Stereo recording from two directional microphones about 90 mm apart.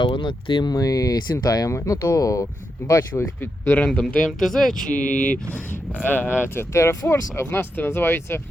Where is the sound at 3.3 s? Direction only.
20° left (ahead or behind).